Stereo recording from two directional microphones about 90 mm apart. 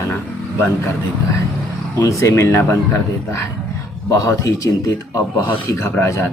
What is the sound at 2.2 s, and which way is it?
Speech, 30° left (ahead or behind).